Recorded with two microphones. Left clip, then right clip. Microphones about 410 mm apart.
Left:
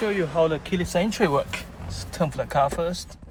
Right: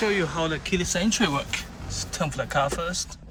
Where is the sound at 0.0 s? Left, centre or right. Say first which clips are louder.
Left 2 dB; centre.